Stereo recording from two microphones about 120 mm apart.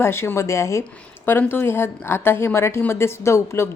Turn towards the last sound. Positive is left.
turn(degrees=20)  # may be behind; listen again after turning